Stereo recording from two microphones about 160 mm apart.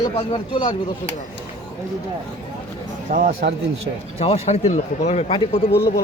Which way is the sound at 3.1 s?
60° right (ahead or behind).